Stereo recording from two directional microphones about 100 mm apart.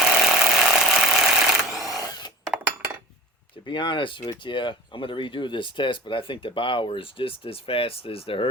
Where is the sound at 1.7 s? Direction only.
Centre (ahead or behind).